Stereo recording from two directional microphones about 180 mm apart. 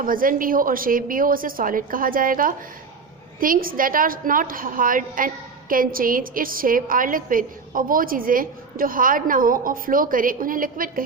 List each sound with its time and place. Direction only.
0.0 s a woman's voice: 50° right (ahead or behind)